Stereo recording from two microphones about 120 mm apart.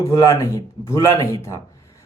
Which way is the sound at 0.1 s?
25° left (ahead or behind).